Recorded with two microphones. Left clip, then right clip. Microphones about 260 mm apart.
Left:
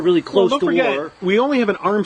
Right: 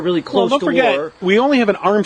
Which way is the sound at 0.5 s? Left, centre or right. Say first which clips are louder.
Right 3 dB; right.